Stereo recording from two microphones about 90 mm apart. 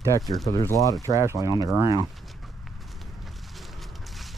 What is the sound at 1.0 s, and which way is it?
Speech, 35° right (ahead or behind).